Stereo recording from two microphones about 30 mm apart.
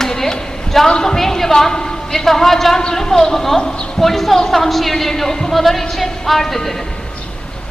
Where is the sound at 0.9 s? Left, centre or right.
Centre.